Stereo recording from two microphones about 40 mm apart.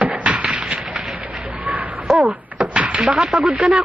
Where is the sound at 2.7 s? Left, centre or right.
Right.